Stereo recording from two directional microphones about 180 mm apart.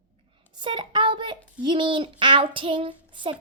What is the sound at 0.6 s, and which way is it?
A woman's voice, 25° right (ahead or behind).